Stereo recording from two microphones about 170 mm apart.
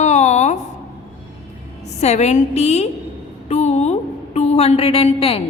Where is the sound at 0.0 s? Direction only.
45° left (ahead or behind).